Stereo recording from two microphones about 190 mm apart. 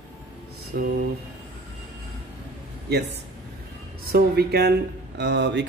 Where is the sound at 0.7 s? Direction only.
60° right (ahead or behind).